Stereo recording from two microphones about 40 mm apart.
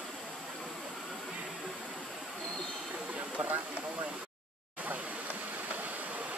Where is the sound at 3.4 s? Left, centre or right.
Right.